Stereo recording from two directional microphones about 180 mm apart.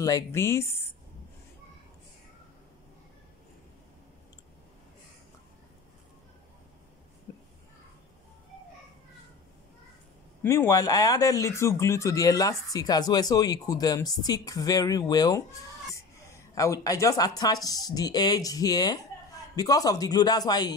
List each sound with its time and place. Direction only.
0.0 s speech: 15° left (ahead or behind)
7.3 s a sound: 20° left (ahead or behind)
10.4 s speech: 15° left (ahead or behind)